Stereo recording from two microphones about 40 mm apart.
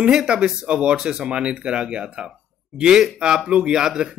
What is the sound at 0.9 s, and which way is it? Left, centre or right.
Speech, centre.